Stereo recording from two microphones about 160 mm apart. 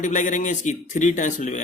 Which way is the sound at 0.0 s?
50° left (ahead or behind).